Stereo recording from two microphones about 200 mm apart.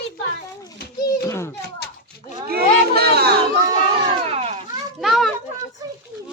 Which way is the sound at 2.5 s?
50° right (ahead or behind).